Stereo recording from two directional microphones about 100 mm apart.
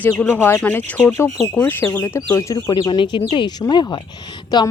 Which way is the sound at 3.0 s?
55° left (ahead or behind).